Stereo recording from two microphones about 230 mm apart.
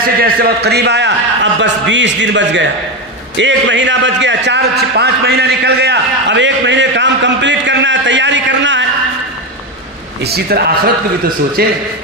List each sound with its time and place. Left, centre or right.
0.0 s a man's voice: right
10.2 s a man's voice: right